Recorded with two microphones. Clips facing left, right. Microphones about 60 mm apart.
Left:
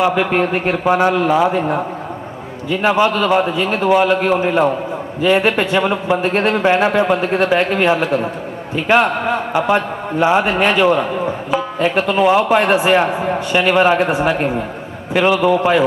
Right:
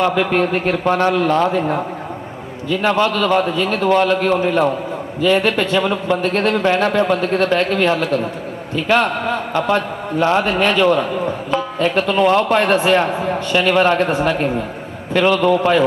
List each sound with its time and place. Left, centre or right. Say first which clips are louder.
0.0 s a man's voice: left 1 dB; centre